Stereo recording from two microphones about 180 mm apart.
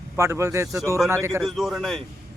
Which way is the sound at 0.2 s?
15° right (ahead or behind).